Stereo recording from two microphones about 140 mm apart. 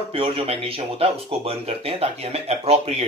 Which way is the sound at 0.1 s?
40° right (ahead or behind).